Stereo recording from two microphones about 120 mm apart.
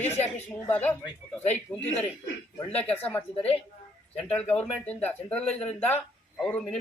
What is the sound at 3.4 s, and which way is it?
Speech, 55° left (ahead or behind).